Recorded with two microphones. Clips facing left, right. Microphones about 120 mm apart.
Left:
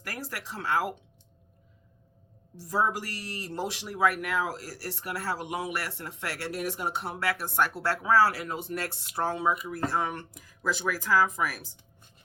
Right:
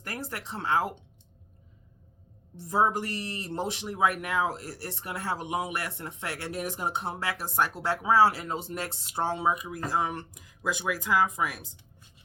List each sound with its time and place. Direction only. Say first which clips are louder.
0.0 s speech: right 1 dB; 25° right (ahead or behind)
2.6 s speech: right 2 dB; 25° right (ahead or behind)
9.6 s speech: even; 15° right (ahead or behind)